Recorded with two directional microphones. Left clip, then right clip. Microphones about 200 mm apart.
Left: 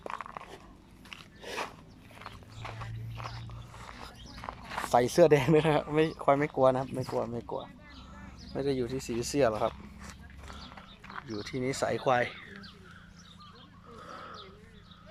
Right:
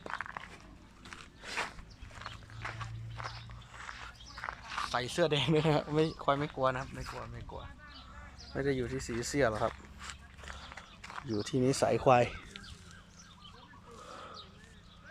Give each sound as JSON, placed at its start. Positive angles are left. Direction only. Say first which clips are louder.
{"t": 0.0, "sound": "biting", "louder": "left 1 dB", "side_deg": 15}
{"t": 2.1, "sound": "horse", "louder": "right 1 dB", "side_deg": 10}
{"t": 3.2, "sound": "music", "louder": "even", "side_deg": 10}
{"t": 3.8, "sound": "a sound", "louder": "right 1 dB", "side_deg": 20}
{"t": 4.4, "sound": "walk", "louder": "right 1 dB", "side_deg": 15}
{"t": 4.6, "sound": "speech", "louder": "left 9 dB", "side_deg": 40}
{"t": 5.5, "sound": "speech", "louder": "left 4 dB", "side_deg": 10}
{"t": 8.5, "sound": "speech", "louder": "left 2 dB", "side_deg": 10}
{"t": 10.5, "sound": "a sound", "louder": "even", "side_deg": 0}
{"t": 14.1, "sound": "a sound", "louder": "left 3 dB", "side_deg": 10}